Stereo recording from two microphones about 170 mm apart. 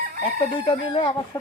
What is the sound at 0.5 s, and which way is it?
Speech, 30° left (ahead or behind).